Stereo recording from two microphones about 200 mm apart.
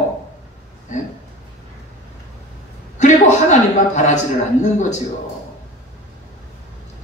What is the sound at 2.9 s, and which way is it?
A man's voice, 35° left (ahead or behind).